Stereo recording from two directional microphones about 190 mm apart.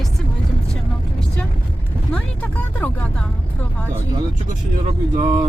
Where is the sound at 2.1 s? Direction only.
5° left (ahead or behind).